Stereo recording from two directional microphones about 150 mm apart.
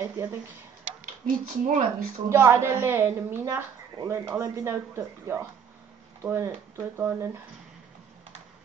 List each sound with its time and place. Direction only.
0.0 s speech: 15° right (ahead or behind)
1.2 s speech: 60° right (ahead or behind)
2.2 s a woman's voice: 20° right (ahead or behind)